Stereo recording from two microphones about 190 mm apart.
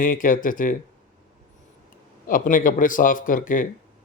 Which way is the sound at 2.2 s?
45° left (ahead or behind).